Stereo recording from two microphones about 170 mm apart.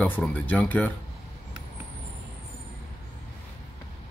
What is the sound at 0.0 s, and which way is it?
Speech, 10° left (ahead or behind).